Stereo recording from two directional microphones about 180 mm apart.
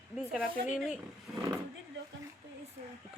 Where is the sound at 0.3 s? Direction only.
5° right (ahead or behind).